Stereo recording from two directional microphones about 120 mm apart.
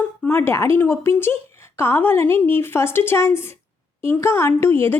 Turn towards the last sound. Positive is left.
turn(degrees=20)  # may be behind; listen again after turning